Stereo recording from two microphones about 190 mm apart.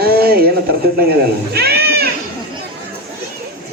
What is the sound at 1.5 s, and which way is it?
Children playing, 55° right (ahead or behind).